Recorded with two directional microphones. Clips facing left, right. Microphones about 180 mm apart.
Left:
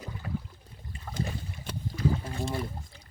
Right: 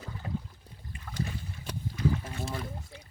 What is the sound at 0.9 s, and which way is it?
Boat, 30° left (ahead or behind).